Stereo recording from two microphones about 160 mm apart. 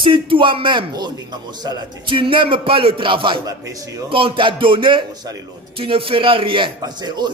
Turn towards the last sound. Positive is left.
turn(degrees=-30)  # may be behind; listen again after turning